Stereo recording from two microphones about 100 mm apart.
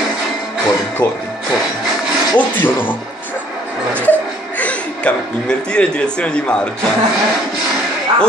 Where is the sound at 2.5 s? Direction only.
20° left (ahead or behind).